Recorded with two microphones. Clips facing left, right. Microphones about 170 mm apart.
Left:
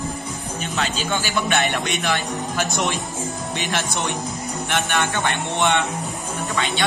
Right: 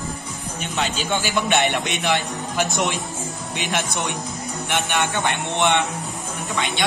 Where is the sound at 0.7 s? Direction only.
20° right (ahead or behind).